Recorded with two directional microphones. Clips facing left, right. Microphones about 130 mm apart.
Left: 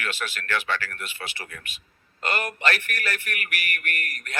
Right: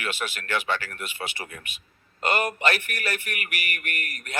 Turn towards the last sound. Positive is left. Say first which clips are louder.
# left 1 dB
turn(degrees=-15)  # may be behind; listen again after turning